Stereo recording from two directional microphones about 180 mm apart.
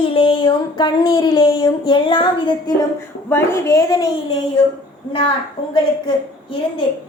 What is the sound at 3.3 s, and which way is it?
Speech, 15° left (ahead or behind).